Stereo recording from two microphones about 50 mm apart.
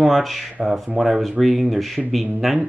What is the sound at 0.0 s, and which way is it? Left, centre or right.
Speech, centre.